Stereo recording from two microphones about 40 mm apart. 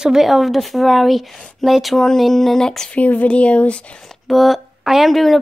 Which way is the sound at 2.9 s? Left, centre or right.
Left.